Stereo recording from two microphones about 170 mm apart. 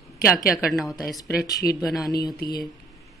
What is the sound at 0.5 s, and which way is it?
Speech, centre (ahead or behind).